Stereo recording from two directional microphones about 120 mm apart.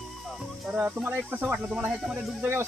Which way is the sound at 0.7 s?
10° right (ahead or behind).